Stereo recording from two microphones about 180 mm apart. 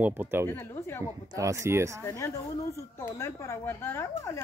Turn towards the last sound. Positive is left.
turn(degrees=15)  # may be behind; listen again after turning